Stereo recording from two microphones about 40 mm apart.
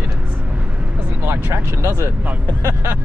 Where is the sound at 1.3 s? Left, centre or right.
Right.